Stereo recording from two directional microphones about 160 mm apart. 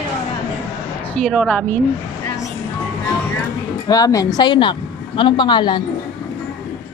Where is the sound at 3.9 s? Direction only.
20° left (ahead or behind).